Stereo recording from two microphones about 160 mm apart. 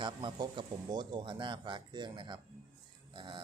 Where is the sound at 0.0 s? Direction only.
30° right (ahead or behind).